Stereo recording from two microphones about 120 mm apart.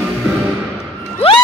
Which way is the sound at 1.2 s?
55° left (ahead or behind).